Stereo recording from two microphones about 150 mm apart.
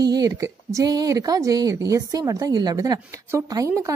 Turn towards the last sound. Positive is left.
turn(degrees=-20)  # may be behind; listen again after turning